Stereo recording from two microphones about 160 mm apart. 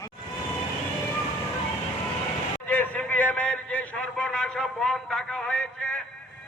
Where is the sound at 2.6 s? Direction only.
10° left (ahead or behind).